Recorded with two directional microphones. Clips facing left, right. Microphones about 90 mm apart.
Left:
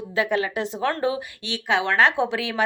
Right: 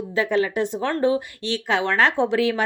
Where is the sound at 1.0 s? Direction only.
35° right (ahead or behind).